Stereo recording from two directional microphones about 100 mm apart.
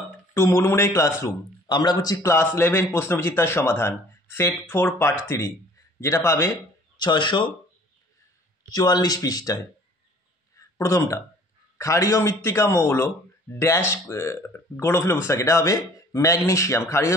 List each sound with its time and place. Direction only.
0.3 s speech: 25° left (ahead or behind)
1.7 s speech: 45° left (ahead or behind); by 6.5 s 30° left (ahead or behind)
7.0 s speech: 50° left (ahead or behind)
8.6 s speech: 40° left (ahead or behind)
10.5 s a sound: 35° left (ahead or behind)
11.8 s speech: 30° left (ahead or behind)